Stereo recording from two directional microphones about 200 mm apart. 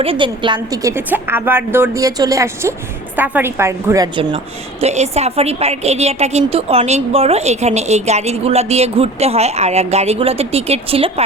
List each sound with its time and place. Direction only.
0.0 s a woman's voice: 25° right (ahead or behind)
4.8 s a woman's voice: 35° right (ahead or behind)